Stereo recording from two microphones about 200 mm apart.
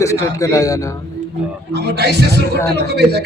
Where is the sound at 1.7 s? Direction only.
55° right (ahead or behind).